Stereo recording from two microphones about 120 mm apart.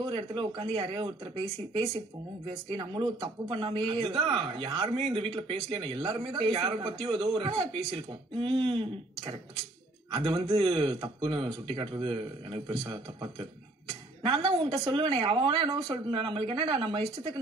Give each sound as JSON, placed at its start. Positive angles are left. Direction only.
{"t": 0.0, "sound": "a man's voice", "side_deg": -45}
{"t": 2.9, "sound": "a man's voice", "side_deg": -45}
{"t": 10.1, "sound": "a man's voice", "side_deg": -50}
{"t": 12.8, "sound": "speech", "side_deg": -30}
{"t": 14.2, "sound": "a man's voice", "side_deg": -45}